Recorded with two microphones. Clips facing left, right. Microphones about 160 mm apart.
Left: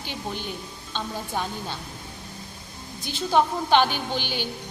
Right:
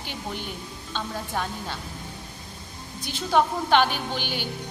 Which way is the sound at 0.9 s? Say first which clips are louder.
Even; centre (ahead or behind).